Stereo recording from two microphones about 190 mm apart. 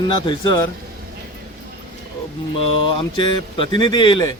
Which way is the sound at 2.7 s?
25° left (ahead or behind).